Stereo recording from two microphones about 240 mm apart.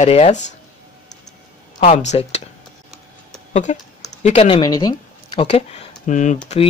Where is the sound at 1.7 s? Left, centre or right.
Left.